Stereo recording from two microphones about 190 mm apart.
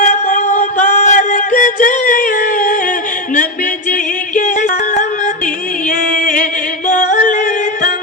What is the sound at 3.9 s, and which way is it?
Music, 45° left (ahead or behind).